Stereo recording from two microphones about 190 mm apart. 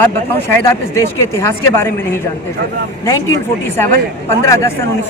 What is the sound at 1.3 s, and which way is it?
Speech, 15° left (ahead or behind).